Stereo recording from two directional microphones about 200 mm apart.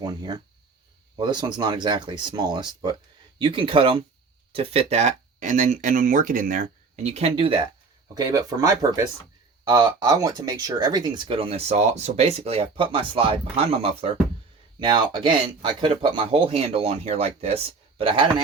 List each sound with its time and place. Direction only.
0.0 s speech: 20° right (ahead or behind)